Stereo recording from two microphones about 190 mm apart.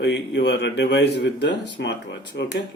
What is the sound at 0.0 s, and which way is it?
Speech, 65° left (ahead or behind).